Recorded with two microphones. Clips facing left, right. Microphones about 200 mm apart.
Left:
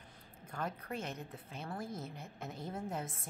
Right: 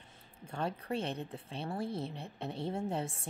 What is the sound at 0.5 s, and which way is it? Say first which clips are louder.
A woman's voice: right 5 dB; 30° right (ahead or behind).